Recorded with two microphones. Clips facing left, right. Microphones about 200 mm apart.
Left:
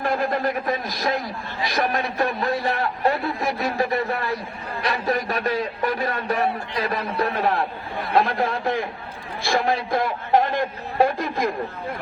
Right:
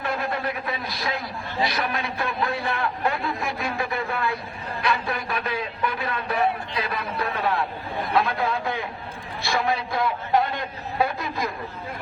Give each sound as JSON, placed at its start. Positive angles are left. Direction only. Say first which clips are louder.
{"t": 0.0, "sound": "a man's voice", "louder": "left 5 dB", "side_deg": 45}